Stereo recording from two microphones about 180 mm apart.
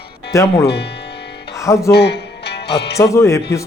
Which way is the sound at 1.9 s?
65° left (ahead or behind).